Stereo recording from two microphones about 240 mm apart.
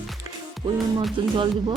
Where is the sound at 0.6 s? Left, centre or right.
Right.